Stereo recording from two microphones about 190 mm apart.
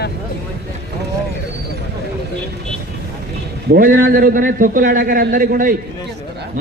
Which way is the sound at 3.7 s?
50° right (ahead or behind).